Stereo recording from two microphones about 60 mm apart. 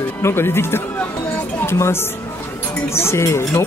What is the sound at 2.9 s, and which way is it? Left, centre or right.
Speech, left.